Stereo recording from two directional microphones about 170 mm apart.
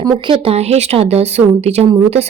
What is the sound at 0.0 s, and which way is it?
Speech, 20° right (ahead or behind).